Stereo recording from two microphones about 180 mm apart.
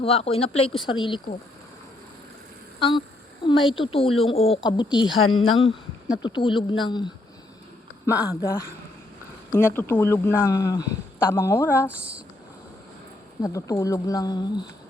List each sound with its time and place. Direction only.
0.0 s speech: 35° left (ahead or behind)
3.4 s speech: 25° left (ahead or behind)
9.5 s speech: 15° left (ahead or behind)
11.9 s speech: 5° right (ahead or behind)
13.4 s speech: 20° left (ahead or behind)